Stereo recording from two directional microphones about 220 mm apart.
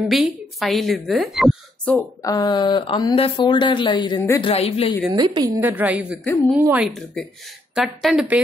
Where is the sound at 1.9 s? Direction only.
15° left (ahead or behind).